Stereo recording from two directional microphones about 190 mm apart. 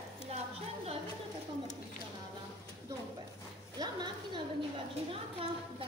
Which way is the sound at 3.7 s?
20° right (ahead or behind).